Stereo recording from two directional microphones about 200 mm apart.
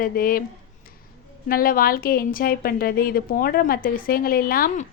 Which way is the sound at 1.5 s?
45° left (ahead or behind).